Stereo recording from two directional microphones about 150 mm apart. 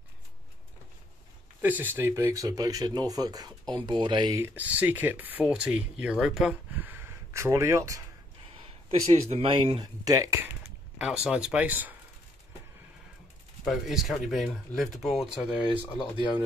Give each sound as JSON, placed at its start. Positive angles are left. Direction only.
{"t": 1.6, "sound": "speech", "side_deg": -10}
{"t": 4.6, "sound": "speech", "side_deg": -10}
{"t": 9.0, "sound": "speech", "side_deg": -45}
{"t": 10.0, "sound": "speech", "side_deg": -20}
{"t": 11.0, "sound": "speech", "side_deg": -5}
{"t": 13.7, "sound": "speech", "side_deg": 0}